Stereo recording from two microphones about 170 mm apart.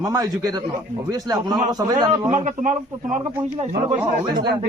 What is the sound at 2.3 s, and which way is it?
Speech, 45° right (ahead or behind).